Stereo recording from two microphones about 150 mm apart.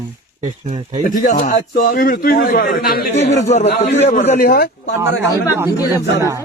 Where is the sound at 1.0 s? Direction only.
55° left (ahead or behind); by 3.1 s 80° left.